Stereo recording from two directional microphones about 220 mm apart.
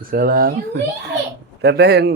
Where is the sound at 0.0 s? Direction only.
40° right (ahead or behind).